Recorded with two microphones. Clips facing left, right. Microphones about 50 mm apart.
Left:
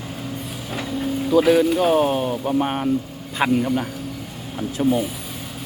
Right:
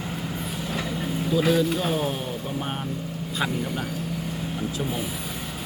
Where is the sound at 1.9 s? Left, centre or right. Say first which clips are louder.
Left 8 dB; left.